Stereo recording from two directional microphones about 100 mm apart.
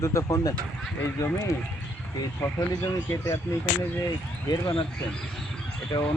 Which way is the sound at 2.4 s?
30° left (ahead or behind).